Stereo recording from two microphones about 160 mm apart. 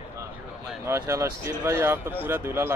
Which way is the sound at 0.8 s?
15° right (ahead or behind).